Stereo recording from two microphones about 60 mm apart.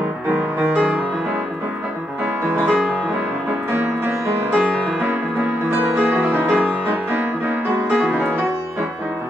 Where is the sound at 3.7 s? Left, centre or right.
Right.